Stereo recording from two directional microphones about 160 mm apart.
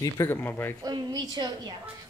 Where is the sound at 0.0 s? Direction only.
15° left (ahead or behind).